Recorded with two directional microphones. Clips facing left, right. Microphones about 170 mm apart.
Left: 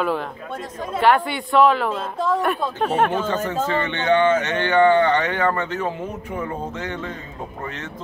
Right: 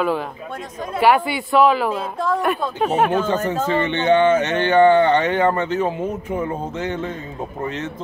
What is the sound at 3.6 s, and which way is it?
Speech, 20° right (ahead or behind).